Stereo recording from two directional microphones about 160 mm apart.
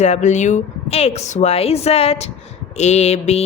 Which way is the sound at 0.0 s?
45° left (ahead or behind).